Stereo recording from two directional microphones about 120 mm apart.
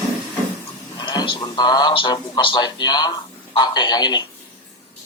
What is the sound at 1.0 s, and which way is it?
A man's voice, 40° left (ahead or behind).